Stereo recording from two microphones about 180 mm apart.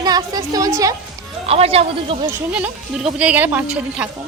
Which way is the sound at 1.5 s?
35° right (ahead or behind).